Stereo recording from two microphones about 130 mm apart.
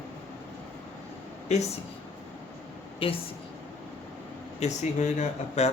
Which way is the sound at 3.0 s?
45° left (ahead or behind).